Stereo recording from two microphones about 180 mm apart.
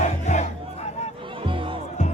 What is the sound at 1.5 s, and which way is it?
Music, 30° right (ahead or behind).